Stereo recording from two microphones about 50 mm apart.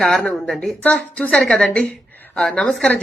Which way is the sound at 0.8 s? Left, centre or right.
Left.